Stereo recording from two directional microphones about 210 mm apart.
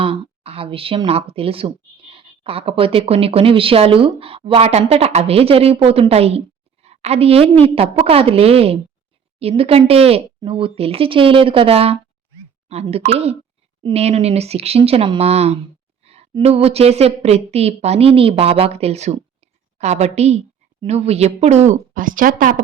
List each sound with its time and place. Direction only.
0.0 s a woman's voice: 25° right (ahead or behind)
13.0 s a woman's voice: 30° right (ahead or behind)